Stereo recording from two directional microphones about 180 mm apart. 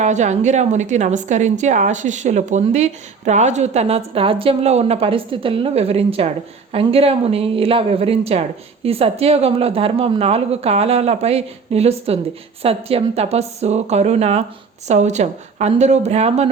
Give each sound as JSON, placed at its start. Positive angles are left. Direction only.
{"t": 0.0, "sound": "a woman's voice", "side_deg": -40}